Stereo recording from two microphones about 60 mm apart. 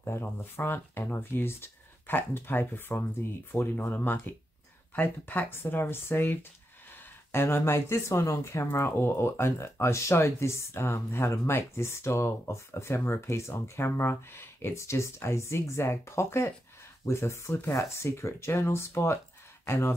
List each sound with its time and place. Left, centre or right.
0.0 s speech: left
6.9 s a sound: left
7.4 s speech: left